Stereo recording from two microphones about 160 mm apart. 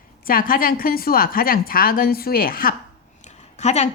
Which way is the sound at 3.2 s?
45° left (ahead or behind).